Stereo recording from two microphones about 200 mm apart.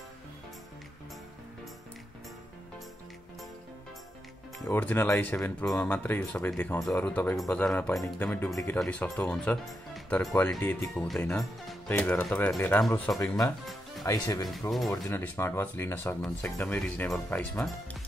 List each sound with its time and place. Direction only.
4.6 s speech: 10° left (ahead or behind)